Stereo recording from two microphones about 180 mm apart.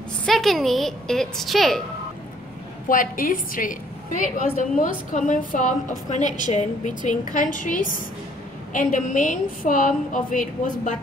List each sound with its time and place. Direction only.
0.2 s a woman's voice: centre (ahead or behind)
2.9 s a woman's voice: 50° left (ahead or behind)